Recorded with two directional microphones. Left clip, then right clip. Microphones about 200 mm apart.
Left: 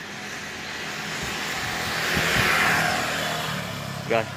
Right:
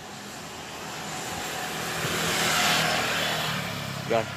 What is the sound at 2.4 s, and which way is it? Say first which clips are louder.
Vehicle: left 3 dB; 60° right (ahead or behind).